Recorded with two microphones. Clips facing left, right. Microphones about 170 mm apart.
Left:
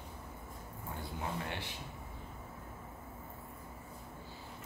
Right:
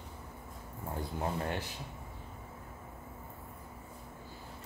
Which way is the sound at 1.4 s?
40° right (ahead or behind).